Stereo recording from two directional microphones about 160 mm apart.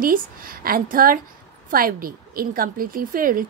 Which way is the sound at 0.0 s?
65° right (ahead or behind).